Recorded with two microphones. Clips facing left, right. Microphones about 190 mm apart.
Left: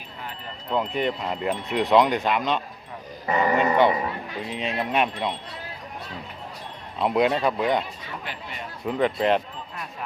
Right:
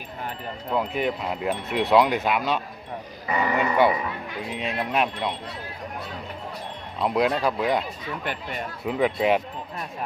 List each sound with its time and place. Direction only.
0.7 s wind chime: 5° right (ahead or behind)
3.2 s speech: 45° left (ahead or behind)
4.4 s wind chime: centre (ahead or behind)
7.0 s wind chime: centre (ahead or behind)
8.2 s speech: 55° right (ahead or behind)
8.8 s speech: 5° right (ahead or behind)